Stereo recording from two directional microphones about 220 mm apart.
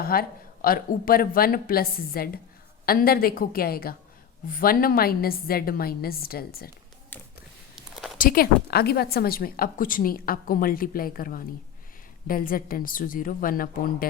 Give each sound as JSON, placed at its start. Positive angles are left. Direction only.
{"t": 0.0, "sound": "a woman's voice", "side_deg": 40}
{"t": 7.1, "sound": "a sound", "side_deg": 10}
{"t": 8.2, "sound": "a woman's voice", "side_deg": 40}